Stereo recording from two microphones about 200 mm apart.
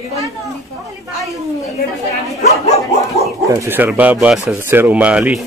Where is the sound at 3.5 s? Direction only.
10° right (ahead or behind).